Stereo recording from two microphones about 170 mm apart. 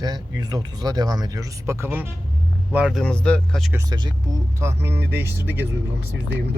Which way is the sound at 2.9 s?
5° left (ahead or behind).